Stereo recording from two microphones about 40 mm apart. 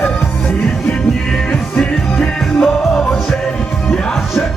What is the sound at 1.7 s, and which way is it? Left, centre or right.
Music, left.